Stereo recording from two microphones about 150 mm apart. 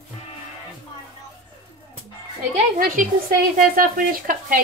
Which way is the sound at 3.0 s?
60° right (ahead or behind).